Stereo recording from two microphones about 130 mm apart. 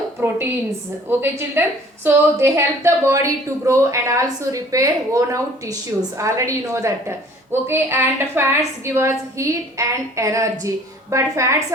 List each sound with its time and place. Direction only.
1.0 s a woman's voice: 15° right (ahead or behind)